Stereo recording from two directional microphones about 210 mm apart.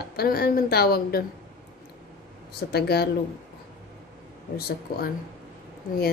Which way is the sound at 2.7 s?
50° left (ahead or behind).